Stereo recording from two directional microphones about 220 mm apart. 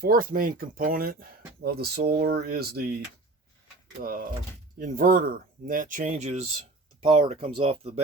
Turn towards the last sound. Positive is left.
turn(degrees=-25)  # may be behind; listen again after turning